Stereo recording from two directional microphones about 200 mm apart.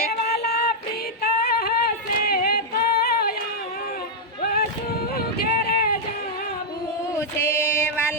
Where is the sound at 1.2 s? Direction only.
50° left (ahead or behind).